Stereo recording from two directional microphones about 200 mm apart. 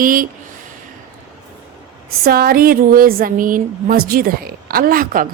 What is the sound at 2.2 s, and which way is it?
A woman's voice, 50° right (ahead or behind).